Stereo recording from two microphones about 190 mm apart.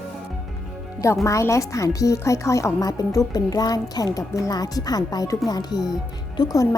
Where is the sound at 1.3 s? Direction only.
15° left (ahead or behind).